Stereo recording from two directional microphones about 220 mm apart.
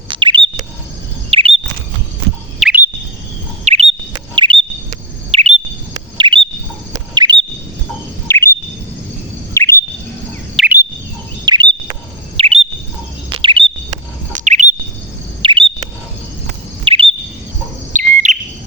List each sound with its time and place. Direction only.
0.1 s bird: 20° right (ahead or behind)
1.3 s chirp: 25° right (ahead or behind)
2.6 s bird: 5° right (ahead or behind)
3.6 s chirp: 30° right (ahead or behind)
8.3 s chirp: 10° left (ahead or behind)
9.6 s bird vocalization: 10° left (ahead or behind)
10.6 s bird: centre (ahead or behind)
11.4 s bird: 20° right (ahead or behind)
12.4 s chirp: 25° right (ahead or behind)
16.8 s chirp: 25° right (ahead or behind)
17.9 s bird: 35° right (ahead or behind)